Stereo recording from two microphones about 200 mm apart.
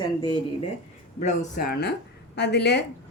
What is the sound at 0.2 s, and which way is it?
Speech, 20° left (ahead or behind).